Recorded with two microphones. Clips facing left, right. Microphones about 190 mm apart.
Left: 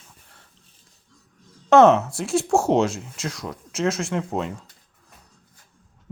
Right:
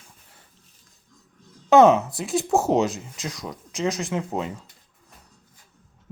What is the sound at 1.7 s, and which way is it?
Speech, centre (ahead or behind).